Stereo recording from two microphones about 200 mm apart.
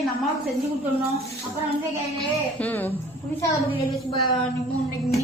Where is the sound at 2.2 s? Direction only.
5° left (ahead or behind).